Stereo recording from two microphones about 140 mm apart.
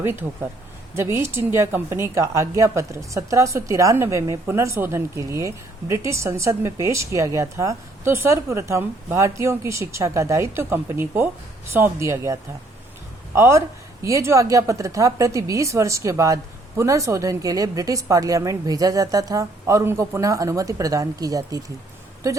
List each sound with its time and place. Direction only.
0.0 s a woman's voice: 15° right (ahead or behind)